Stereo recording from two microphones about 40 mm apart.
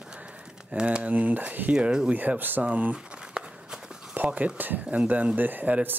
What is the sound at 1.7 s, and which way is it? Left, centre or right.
Speech, right.